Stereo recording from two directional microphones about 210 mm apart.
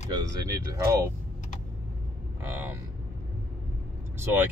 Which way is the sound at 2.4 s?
10° right (ahead or behind).